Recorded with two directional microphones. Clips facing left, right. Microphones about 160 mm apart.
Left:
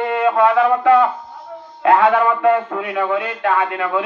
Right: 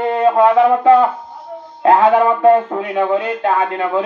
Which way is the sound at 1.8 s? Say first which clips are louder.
Right 2 dB; 30° right (ahead or behind).